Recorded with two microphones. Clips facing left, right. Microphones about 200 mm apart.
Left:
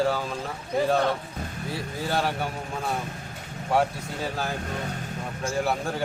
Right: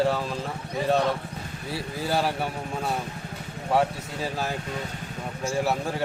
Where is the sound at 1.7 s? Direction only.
5° right (ahead or behind).